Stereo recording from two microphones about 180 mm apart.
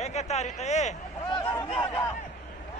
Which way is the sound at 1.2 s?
25° left (ahead or behind).